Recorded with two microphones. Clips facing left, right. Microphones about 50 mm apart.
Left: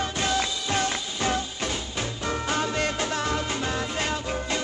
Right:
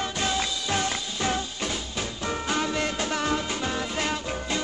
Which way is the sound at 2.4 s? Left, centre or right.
Left.